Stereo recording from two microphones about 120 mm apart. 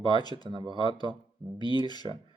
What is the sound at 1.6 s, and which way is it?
Speech, 35° left (ahead or behind).